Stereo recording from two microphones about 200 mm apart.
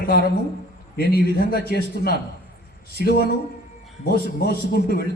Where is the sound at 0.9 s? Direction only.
50° left (ahead or behind).